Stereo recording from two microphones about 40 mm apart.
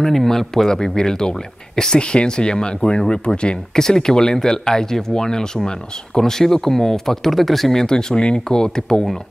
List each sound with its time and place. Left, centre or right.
0.0 s speech: centre
7.8 s speech: centre